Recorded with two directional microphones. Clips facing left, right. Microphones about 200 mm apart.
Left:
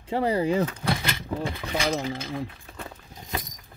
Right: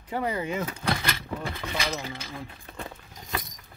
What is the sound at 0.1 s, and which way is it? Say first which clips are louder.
Speech: left 6 dB; 30° left (ahead or behind).